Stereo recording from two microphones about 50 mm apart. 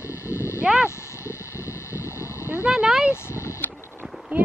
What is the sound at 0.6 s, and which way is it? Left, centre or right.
Speech, centre.